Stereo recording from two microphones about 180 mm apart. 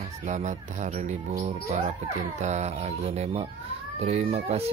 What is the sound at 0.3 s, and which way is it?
Speech, 40° right (ahead or behind).